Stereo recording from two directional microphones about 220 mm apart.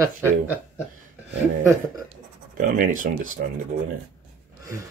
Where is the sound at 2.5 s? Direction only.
35° right (ahead or behind).